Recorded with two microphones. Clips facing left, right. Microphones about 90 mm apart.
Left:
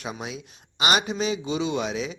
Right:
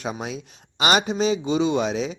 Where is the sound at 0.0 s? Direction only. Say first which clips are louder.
Right 4 dB; 35° right (ahead or behind).